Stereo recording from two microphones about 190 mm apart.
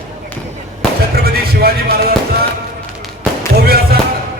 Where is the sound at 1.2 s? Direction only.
55° right (ahead or behind).